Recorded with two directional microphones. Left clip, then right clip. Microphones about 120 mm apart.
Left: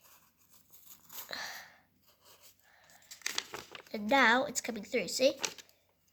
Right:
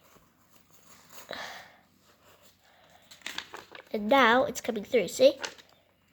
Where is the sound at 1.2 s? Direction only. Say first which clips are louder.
Right 2 dB; 25° right (ahead or behind).